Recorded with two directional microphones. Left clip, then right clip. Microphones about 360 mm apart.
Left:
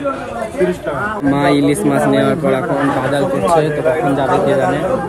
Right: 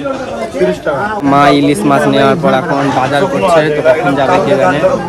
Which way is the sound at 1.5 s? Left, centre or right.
Centre.